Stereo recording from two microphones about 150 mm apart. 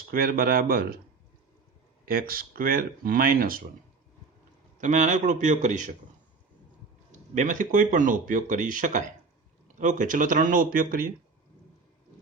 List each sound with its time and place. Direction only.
0.1 s speech: 75° right (ahead or behind)
2.0 s speech: 75° right (ahead or behind)
4.8 s speech: 55° right (ahead or behind)
7.1 s speech: 60° right (ahead or behind)